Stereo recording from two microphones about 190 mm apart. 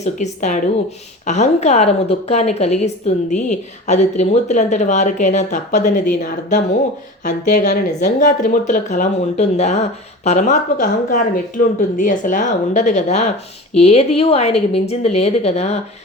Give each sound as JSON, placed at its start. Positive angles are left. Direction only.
{"t": 0.0, "sound": "a woman's voice", "side_deg": 40}